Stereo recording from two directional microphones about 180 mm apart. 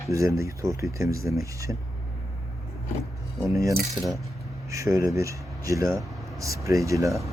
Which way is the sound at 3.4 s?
15° right (ahead or behind).